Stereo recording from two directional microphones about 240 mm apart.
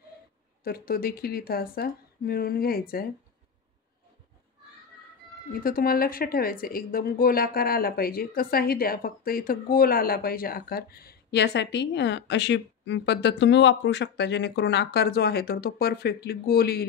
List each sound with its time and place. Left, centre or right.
0.7 s a woman's voice: left
5.5 s a woman's voice: left